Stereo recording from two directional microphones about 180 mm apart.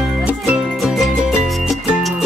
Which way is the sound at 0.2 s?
5° right (ahead or behind).